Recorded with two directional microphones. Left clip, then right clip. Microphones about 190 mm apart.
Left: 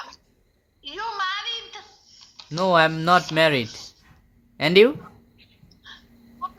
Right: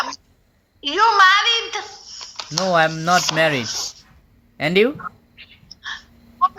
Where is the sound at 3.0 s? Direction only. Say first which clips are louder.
Right 1 dB; 10° left (ahead or behind).